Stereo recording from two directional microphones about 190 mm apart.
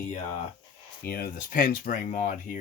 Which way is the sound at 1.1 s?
50° left (ahead or behind).